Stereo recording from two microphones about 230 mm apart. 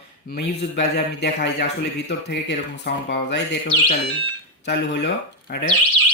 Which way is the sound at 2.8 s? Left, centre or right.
Left.